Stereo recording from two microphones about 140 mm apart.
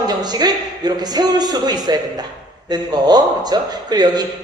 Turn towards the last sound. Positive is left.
turn(degrees=-30)  # may be behind; listen again after turning